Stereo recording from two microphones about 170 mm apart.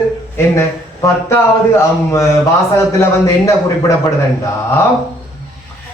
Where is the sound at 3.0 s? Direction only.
20° left (ahead or behind).